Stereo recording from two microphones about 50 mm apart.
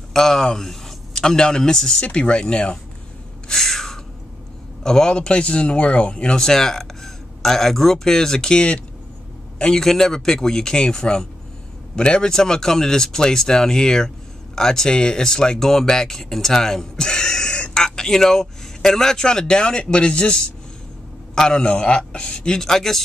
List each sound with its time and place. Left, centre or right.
0.1 s speech: centre
3.4 s gasp: centre
4.8 s speech: centre
9.7 s speech: centre